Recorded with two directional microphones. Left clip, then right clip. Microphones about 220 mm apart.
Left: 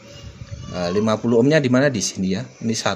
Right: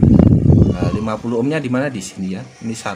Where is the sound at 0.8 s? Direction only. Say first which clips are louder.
Left 2 dB; 15° left (ahead or behind).